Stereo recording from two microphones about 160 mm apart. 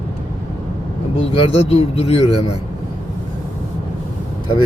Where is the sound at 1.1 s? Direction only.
35° left (ahead or behind).